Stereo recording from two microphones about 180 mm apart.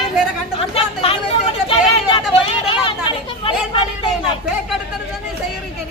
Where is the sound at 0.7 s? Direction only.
35° left (ahead or behind).